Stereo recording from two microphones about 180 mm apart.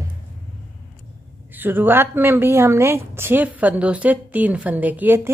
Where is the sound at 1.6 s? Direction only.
10° right (ahead or behind).